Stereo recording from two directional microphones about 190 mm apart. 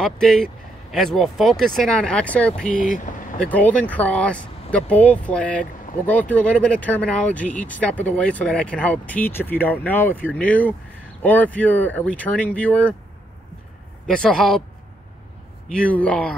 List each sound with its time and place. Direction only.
0.0 s speech: centre (ahead or behind)
2.7 s speech: 45° left (ahead or behind)
3.4 s speech: 5° left (ahead or behind)
14.0 s speech: 5° left (ahead or behind)
15.7 s speech: 5° left (ahead or behind)